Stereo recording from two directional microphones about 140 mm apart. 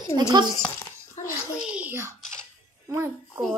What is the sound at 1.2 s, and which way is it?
Bathtub, 55° left (ahead or behind).